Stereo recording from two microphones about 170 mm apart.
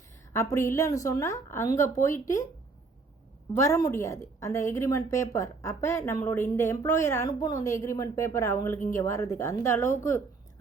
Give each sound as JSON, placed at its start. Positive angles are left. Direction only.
{"t": 0.3, "sound": "a woman's voice", "side_deg": 15}
{"t": 3.5, "sound": "a woman's voice", "side_deg": 15}